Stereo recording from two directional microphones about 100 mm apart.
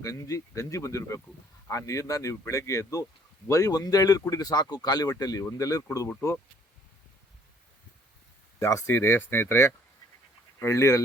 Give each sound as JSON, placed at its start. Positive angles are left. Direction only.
{"t": 0.0, "sound": "speech", "side_deg": 30}
{"t": 8.5, "sound": "speech", "side_deg": 30}